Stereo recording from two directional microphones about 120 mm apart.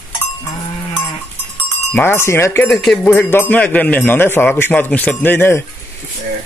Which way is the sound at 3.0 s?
15° left (ahead or behind).